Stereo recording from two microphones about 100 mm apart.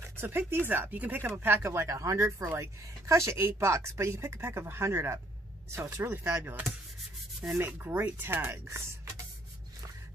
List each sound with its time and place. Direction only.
0.2 s speech: 20° right (ahead or behind)